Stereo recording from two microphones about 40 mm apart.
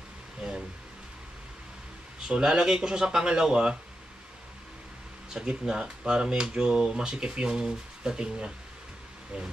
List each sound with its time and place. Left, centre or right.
2.2 s speech: centre
5.4 s speech: centre